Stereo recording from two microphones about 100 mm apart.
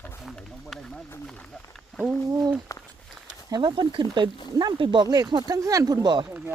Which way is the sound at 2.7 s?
30° left (ahead or behind).